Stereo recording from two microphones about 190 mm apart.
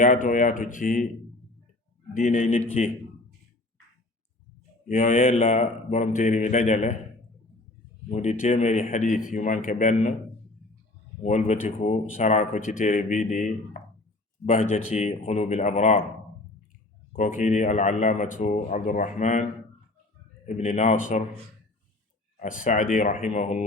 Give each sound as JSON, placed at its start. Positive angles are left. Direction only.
{"t": 0.0, "sound": "speech", "side_deg": 45}
{"t": 2.1, "sound": "a man's voice", "side_deg": 40}
{"t": 4.9, "sound": "a man's voice", "side_deg": 45}
{"t": 8.1, "sound": "a man's voice", "side_deg": 40}
{"t": 11.2, "sound": "a man's voice", "side_deg": 40}
{"t": 17.1, "sound": "a man's voice", "side_deg": 40}
{"t": 20.6, "sound": "a man's voice", "side_deg": 40}
{"t": 22.4, "sound": "a man's voice", "side_deg": 45}